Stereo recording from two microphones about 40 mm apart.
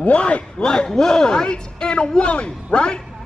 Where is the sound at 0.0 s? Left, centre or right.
Left.